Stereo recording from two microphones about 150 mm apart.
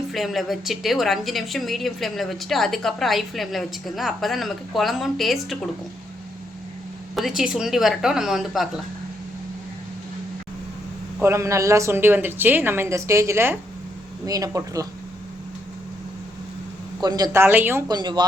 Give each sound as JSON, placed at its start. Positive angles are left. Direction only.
{"t": 0.1, "sound": "a woman's voice", "side_deg": 0}
{"t": 7.2, "sound": "a woman's voice", "side_deg": 0}
{"t": 11.2, "sound": "a woman's voice", "side_deg": -20}
{"t": 17.0, "sound": "speech", "side_deg": -25}
{"t": 17.4, "sound": "a woman's voice", "side_deg": -15}
{"t": 17.8, "sound": "speech", "side_deg": -25}